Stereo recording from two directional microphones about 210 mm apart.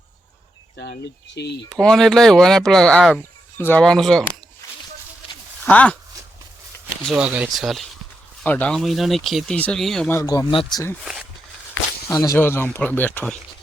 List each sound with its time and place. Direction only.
0.8 s speech: 50° left (ahead or behind)
1.8 s speech: 5° left (ahead or behind)
5.6 s speech: 5° left (ahead or behind)
7.0 s speech: 5° right (ahead or behind); by 10.9 s 20° left (ahead or behind)
11.0 s a sound: centre (ahead or behind)
12.0 s speech: 15° left (ahead or behind)